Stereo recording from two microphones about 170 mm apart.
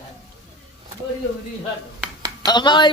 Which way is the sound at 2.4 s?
25° left (ahead or behind).